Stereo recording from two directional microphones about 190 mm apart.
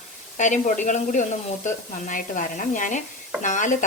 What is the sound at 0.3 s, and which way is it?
A woman's voice, 40° left (ahead or behind).